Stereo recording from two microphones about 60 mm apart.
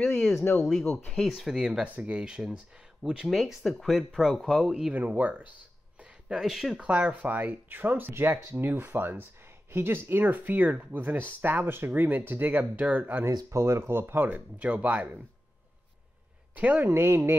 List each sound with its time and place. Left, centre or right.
0.4 s speech: left
1.0 s speech: centre
1.3 s speech: centre
3.3 s speech: centre
4.9 s speech: right
6.4 s speech: centre
6.8 s speech: right
13.5 s speech: right
16.5 s speech: right
16.9 s speech: right